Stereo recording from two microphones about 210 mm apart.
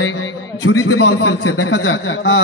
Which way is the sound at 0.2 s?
90° left.